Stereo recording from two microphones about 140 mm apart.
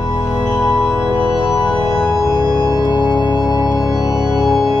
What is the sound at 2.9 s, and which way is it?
Organ, 30° left (ahead or behind).